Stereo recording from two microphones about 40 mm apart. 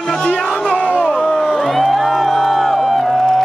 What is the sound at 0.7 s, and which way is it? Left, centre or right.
Crowd, left.